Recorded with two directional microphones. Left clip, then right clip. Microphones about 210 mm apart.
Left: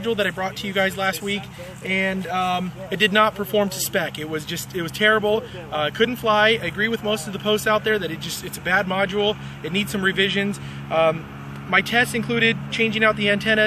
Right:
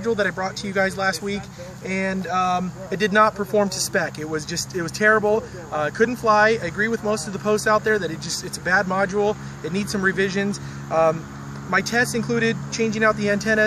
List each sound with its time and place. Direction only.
0.0 s speech: 20° left (ahead or behind)